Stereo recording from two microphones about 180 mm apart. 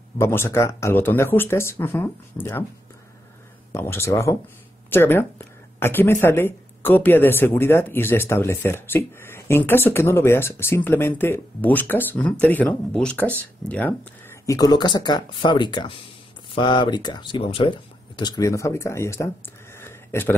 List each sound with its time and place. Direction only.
0.2 s speech: 15° left (ahead or behind)
3.7 s speech: 15° left (ahead or behind)
19.8 s a sound: 10° left (ahead or behind)